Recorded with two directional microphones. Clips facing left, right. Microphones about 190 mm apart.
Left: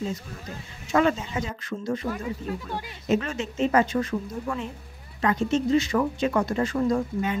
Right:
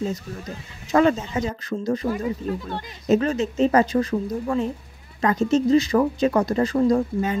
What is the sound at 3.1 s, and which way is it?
Speech, 35° right (ahead or behind).